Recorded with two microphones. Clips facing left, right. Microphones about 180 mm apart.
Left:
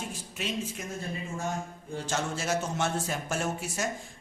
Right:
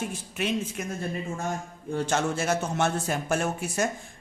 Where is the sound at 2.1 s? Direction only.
55° right (ahead or behind).